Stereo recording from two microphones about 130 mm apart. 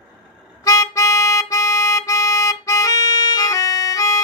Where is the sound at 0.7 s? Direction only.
25° left (ahead or behind).